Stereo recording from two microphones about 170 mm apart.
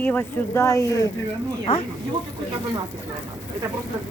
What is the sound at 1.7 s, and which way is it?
Speech, 35° left (ahead or behind).